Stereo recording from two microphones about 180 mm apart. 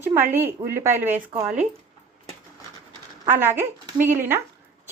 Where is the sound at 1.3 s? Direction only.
40° right (ahead or behind).